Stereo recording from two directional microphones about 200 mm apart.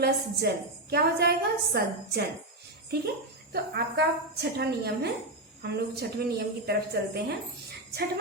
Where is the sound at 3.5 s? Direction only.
55° right (ahead or behind).